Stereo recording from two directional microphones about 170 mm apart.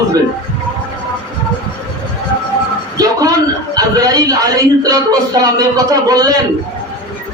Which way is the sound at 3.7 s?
20° right (ahead or behind).